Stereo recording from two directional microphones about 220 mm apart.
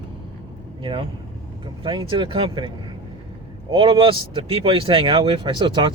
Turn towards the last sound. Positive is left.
turn(degrees=-20)  # may be behind; listen again after turning